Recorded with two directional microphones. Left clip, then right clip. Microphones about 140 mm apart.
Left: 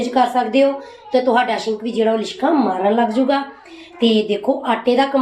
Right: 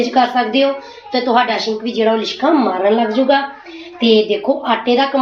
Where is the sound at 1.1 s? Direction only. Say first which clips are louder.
Right 1 dB; 15° left (ahead or behind).